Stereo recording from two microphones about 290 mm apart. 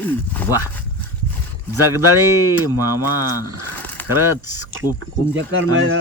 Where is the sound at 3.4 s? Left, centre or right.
Centre.